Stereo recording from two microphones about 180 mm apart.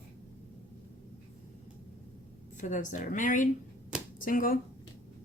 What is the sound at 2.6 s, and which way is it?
A woman's voice, 45° left (ahead or behind).